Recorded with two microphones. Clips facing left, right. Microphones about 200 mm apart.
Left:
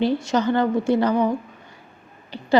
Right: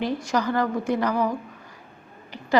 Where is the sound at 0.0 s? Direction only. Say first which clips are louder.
Left 4 dB; 25° left (ahead or behind).